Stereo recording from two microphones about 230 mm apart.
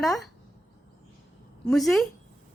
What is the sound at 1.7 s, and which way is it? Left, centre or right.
Speech, centre.